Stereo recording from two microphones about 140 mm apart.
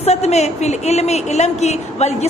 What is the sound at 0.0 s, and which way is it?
A woman's voice, 50° left (ahead or behind).